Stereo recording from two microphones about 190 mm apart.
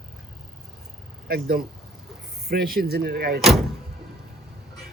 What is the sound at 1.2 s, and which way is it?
Speech, 55° right (ahead or behind).